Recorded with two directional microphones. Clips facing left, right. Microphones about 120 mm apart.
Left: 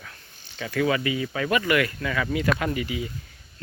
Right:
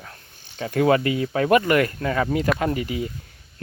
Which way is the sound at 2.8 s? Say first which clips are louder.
Right 3 dB; 45° right (ahead or behind).